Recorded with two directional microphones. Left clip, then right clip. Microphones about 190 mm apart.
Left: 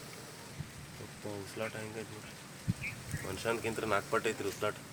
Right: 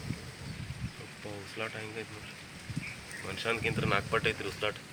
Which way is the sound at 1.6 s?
75° left (ahead or behind).